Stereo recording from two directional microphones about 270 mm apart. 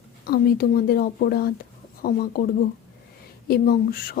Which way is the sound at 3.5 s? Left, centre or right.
Left.